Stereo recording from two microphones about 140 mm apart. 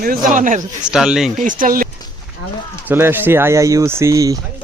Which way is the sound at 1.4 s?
75° right (ahead or behind).